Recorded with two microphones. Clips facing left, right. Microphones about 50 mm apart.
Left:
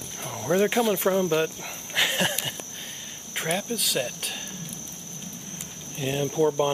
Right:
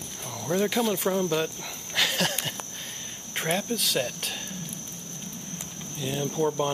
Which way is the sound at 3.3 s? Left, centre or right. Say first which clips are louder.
Even; centre.